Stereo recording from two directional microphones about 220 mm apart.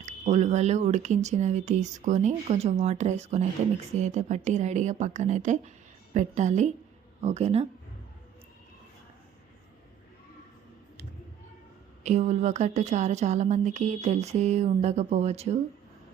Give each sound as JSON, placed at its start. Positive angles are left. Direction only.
{"t": 0.0, "sound": "speech", "side_deg": -30}
{"t": 12.0, "sound": "speech", "side_deg": -30}